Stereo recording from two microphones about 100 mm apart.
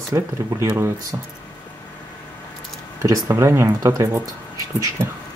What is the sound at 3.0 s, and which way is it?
Speech, 35° right (ahead or behind).